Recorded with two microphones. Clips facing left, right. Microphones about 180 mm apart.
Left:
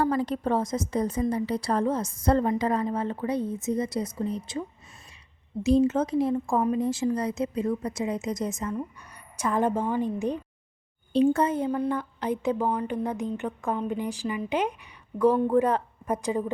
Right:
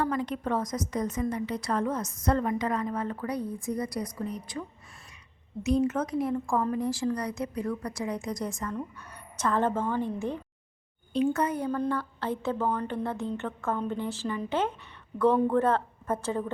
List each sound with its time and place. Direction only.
0.0 s a woman's voice: 35° left (ahead or behind)
5.6 s a woman's voice: 30° left (ahead or behind)
11.1 s a woman's voice: 30° left (ahead or behind); by 16.5 s 15° left (ahead or behind)